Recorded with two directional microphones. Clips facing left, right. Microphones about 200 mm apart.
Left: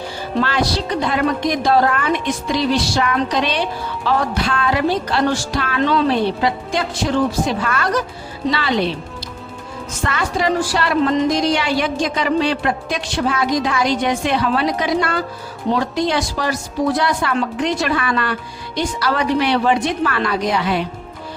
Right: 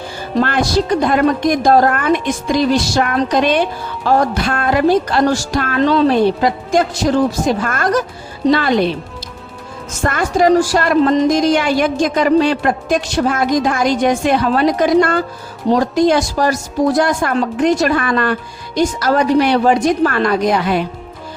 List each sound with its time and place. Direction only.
0.3 s a woman's voice: 50° right (ahead or behind)
10.0 s a woman's voice: 45° right (ahead or behind)